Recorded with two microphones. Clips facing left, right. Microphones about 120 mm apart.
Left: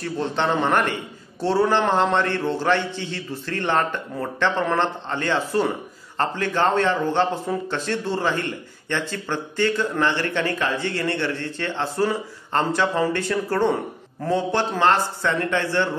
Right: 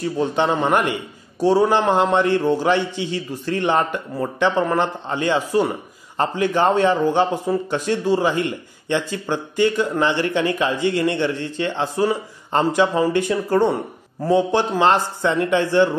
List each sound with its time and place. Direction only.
0.0 s a man's voice: 15° right (ahead or behind)